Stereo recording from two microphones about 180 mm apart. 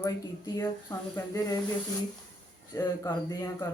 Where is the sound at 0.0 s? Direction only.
20° left (ahead or behind).